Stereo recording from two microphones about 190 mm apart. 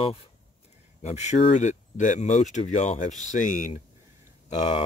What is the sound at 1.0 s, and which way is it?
Speech, 35° left (ahead or behind).